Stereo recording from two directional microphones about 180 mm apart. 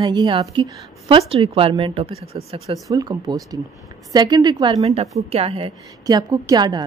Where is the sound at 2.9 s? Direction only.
20° right (ahead or behind).